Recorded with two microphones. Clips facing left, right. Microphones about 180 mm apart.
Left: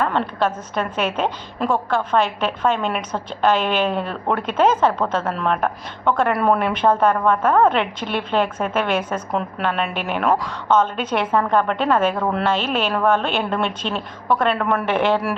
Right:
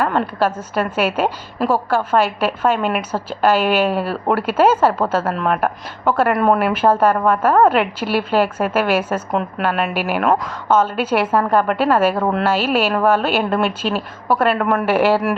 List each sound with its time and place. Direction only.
0.0 s a woman's voice: 5° right (ahead or behind)